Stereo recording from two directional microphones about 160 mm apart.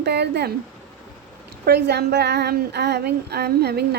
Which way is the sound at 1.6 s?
90° right.